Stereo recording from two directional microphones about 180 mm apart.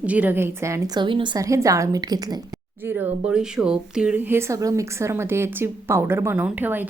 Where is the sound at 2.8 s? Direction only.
10° right (ahead or behind).